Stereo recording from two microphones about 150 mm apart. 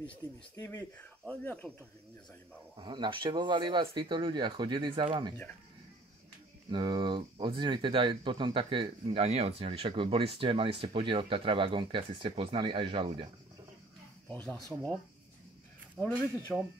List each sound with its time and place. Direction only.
0.6 s speech: 20° left (ahead or behind)
0.9 s speech: 10° left (ahead or behind)
2.8 s speech: 30° right (ahead or behind)
6.7 s speech: 30° right (ahead or behind)
14.3 s speech: 10° left (ahead or behind)
16.0 s speech: 10° left (ahead or behind)